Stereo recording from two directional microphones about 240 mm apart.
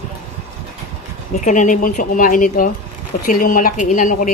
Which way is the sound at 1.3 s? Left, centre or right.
Left.